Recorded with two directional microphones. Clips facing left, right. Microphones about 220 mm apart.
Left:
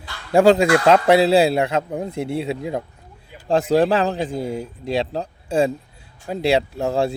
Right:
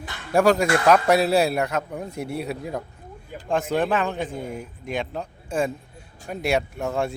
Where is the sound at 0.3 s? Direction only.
25° left (ahead or behind).